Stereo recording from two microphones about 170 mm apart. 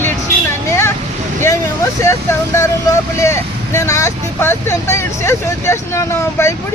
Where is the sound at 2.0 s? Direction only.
15° left (ahead or behind).